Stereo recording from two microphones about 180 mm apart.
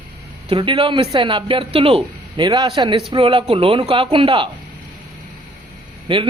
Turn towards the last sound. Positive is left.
turn(degrees=-30)  # may be behind; listen again after turning